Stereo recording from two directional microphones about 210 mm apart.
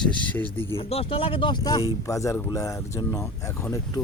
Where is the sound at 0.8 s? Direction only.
25° left (ahead or behind).